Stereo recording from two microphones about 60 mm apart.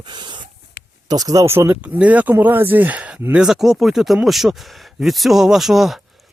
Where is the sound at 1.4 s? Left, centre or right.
Right.